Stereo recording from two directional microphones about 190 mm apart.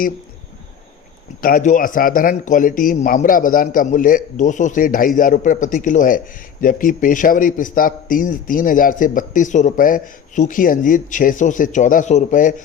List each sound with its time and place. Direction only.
1.4 s a man's voice: 45° left (ahead or behind)